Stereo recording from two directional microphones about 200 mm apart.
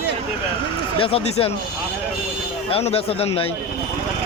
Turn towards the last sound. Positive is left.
turn(degrees=30)  # may be behind; listen again after turning